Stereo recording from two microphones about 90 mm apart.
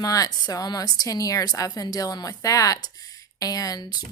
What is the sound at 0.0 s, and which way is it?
Speech, 40° left (ahead or behind).